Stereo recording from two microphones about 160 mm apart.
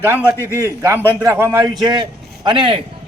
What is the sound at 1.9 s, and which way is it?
Speech, 30° right (ahead or behind).